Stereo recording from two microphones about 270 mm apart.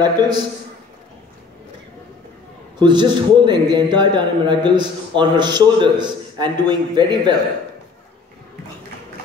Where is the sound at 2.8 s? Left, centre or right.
Centre.